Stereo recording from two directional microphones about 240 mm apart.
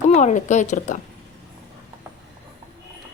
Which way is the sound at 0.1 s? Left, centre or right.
Left.